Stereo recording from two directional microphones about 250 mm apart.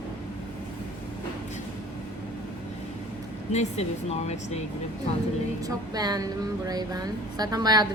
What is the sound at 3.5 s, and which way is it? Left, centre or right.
Speech, left.